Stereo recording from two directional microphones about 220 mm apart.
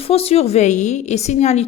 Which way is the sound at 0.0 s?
25° left (ahead or behind).